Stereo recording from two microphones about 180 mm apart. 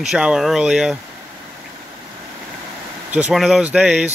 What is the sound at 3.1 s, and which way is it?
Speech, 5° right (ahead or behind).